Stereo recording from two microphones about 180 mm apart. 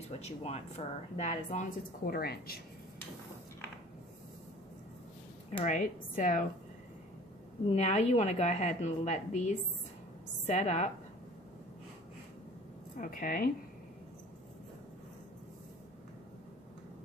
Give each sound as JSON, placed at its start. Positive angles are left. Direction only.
{"t": 0.2, "sound": "speech", "side_deg": 35}
{"t": 5.6, "sound": "speech", "side_deg": 45}
{"t": 7.7, "sound": "speech", "side_deg": 40}
{"t": 12.9, "sound": "speech", "side_deg": 50}